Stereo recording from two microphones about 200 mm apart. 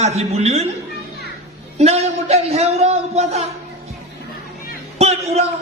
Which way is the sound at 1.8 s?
30° right (ahead or behind).